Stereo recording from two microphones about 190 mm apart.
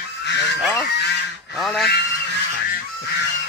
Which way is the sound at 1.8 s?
65° left (ahead or behind).